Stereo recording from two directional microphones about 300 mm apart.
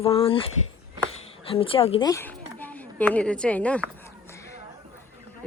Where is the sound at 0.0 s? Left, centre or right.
Centre.